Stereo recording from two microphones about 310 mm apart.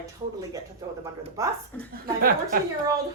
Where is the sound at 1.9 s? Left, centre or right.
Right.